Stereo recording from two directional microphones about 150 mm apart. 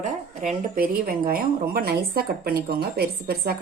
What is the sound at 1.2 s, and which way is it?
Speech, 90° right.